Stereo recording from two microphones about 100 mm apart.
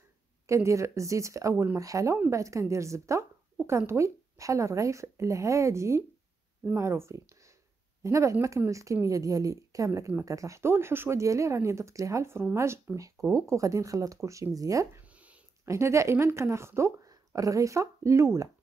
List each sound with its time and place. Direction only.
0.5 s speech: 30° right (ahead or behind)
15.0 s a sound: 15° right (ahead or behind)
15.6 s speech: 30° right (ahead or behind)